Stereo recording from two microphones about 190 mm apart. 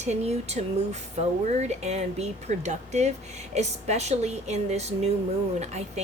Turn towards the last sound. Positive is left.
turn(degrees=-35)  # may be behind; listen again after turning